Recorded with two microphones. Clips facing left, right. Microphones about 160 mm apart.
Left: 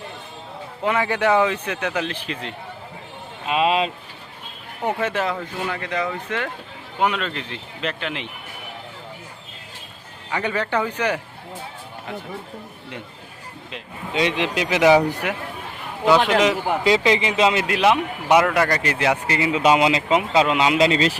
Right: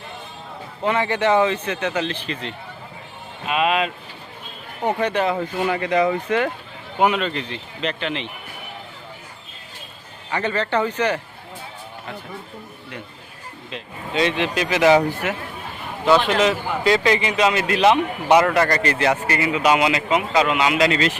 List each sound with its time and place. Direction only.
0.9 s speech: 5° left (ahead or behind)
3.4 s a man's voice: 30° left (ahead or behind)
4.9 s speech: 5° left (ahead or behind)
5.3 s speech: 15° right (ahead or behind)
7.0 s speech: 5° right (ahead or behind)
10.3 s speech: 10° left (ahead or behind)
13.7 s a man's voice: 10° left (ahead or behind); by 21.2 s 30° left (ahead or behind)